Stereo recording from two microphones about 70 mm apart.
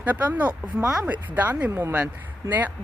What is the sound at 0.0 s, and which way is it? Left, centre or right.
Speech, right.